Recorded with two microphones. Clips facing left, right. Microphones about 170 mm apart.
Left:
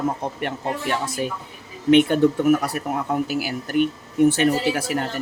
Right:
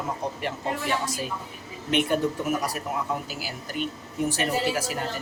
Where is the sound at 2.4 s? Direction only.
60° left (ahead or behind).